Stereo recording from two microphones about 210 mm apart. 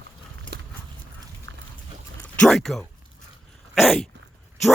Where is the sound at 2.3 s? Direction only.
Centre (ahead or behind).